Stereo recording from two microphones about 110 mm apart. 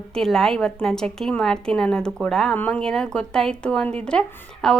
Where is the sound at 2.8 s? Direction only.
5° left (ahead or behind).